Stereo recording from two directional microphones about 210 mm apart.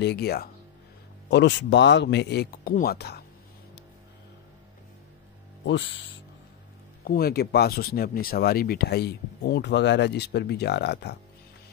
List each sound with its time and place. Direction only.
0.0 s speech: 50° left (ahead or behind)
5.7 s speech: 55° left (ahead or behind)
7.1 s speech: 45° left (ahead or behind)